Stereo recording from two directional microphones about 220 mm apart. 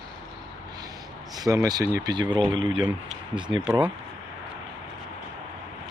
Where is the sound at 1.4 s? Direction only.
15° right (ahead or behind).